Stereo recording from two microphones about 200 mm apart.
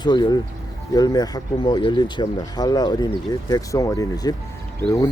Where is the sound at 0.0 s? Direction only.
20° left (ahead or behind).